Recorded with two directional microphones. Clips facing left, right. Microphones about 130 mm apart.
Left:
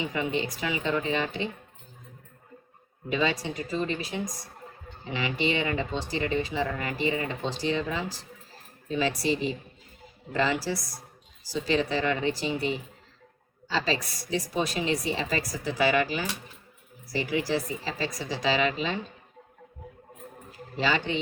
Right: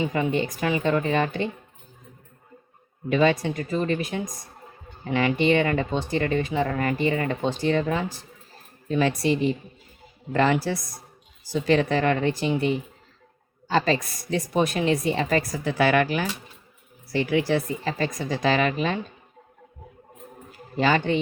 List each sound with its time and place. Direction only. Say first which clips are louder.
0.0 s speech: right 5 dB; 50° right (ahead or behind)
3.1 s a woman's voice: right 7 dB; 55° right (ahead or behind)
13.7 s a woman's voice: right 6 dB; 55° right (ahead or behind)
20.7 s speech: right 6 dB; 50° right (ahead or behind)